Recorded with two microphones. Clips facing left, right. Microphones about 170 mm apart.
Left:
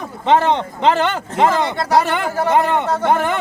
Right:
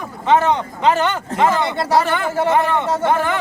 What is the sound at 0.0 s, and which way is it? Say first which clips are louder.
Speech: left 1 dB; 25° left (ahead or behind).